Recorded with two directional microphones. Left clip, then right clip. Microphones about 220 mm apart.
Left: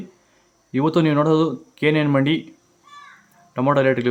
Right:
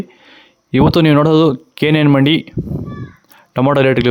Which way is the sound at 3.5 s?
40° right (ahead or behind).